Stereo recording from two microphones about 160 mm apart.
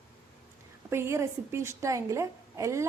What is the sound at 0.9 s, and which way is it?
A woman's voice, 15° right (ahead or behind).